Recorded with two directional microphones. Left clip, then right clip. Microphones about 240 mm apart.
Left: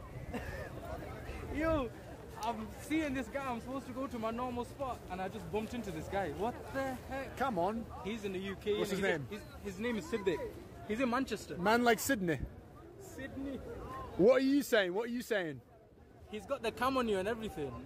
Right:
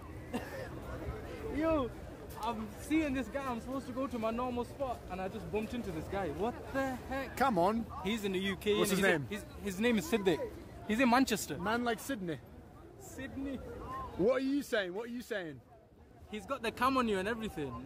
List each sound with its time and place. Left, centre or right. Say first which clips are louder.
1.6 s speech: right 1 dB; centre
6.7 s a man's voice: right 2 dB; right
8.0 s speech: right 5 dB; right
11.6 s speech: left 8 dB; left
14.2 s speech: left 4 dB; left
16.3 s a man's voice: even; right